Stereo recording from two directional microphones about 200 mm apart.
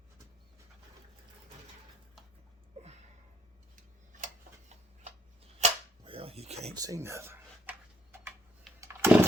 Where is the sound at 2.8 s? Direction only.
30° right (ahead or behind).